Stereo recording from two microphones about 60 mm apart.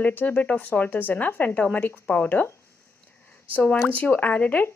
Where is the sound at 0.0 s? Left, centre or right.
Left.